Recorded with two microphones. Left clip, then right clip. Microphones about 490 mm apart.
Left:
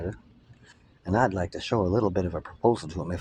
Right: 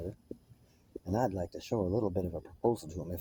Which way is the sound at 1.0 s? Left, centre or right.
Right.